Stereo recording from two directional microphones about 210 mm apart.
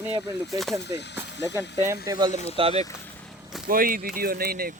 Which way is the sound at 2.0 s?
20° right (ahead or behind).